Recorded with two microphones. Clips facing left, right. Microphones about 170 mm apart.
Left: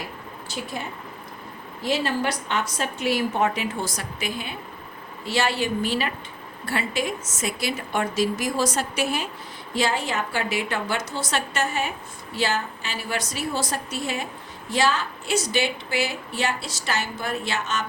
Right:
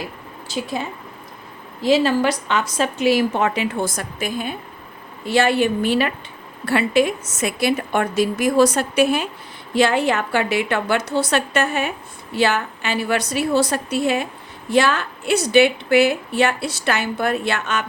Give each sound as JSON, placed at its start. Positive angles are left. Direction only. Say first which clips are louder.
{"t": 0.4, "sound": "a woman's voice", "louder": "right 7 dB", "side_deg": -90}
{"t": 1.8, "sound": "a woman's voice", "louder": "right 8 dB", "side_deg": -90}